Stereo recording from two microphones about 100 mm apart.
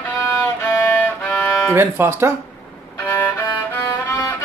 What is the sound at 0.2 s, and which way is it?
Violin, 20° left (ahead or behind).